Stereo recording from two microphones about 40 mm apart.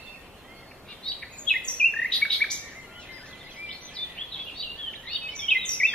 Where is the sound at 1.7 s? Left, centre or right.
Left.